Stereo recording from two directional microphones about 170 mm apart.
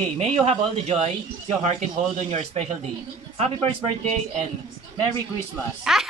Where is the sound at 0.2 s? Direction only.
35° right (ahead or behind).